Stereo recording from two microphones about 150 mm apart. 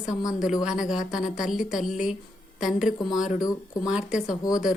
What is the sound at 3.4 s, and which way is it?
Speech, 25° left (ahead or behind).